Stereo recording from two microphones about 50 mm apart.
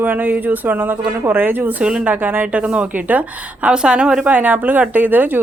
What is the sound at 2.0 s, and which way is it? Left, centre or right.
Speech, right.